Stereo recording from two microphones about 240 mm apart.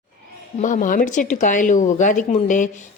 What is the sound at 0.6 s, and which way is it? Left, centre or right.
A woman's voice, left.